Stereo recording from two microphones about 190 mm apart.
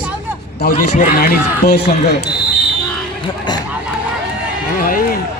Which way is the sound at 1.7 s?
60° left (ahead or behind).